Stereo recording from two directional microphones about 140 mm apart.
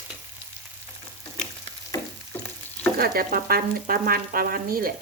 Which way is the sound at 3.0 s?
90° right.